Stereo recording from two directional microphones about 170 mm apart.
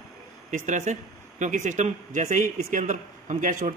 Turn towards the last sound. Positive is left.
turn(degrees=-50)  # may be behind; listen again after turning